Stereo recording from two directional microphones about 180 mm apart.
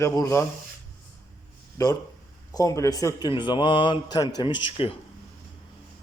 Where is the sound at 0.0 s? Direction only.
15° left (ahead or behind).